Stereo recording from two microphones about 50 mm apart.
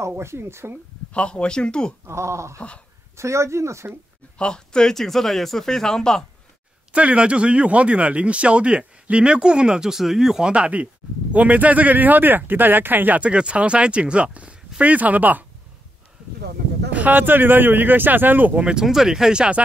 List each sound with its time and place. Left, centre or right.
0.2 s speech: right
1.1 s speech: left
2.0 s speech: right
4.4 s speech: centre
6.9 s speech: right; by 10.5 s centre
10.5 s speech: right
13.2 s speech: right
16.9 s speech: right
18.5 s speech: centre
18.9 s speech: centre